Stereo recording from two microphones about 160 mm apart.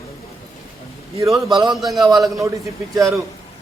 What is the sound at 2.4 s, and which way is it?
Speech, 20° right (ahead or behind).